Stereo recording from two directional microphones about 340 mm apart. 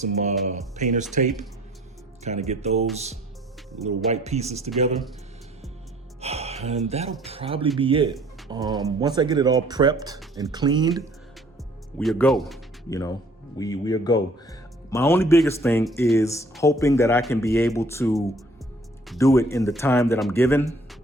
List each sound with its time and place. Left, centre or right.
0.0 s speech: centre
2.5 s speech: centre
3.8 s speech: centre
6.2 s gasp: centre
7.3 s speech: centre
11.9 s speech: centre